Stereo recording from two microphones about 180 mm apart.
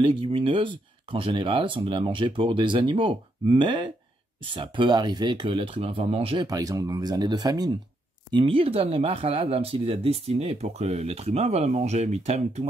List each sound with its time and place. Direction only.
0.0 s speech: 30° right (ahead or behind)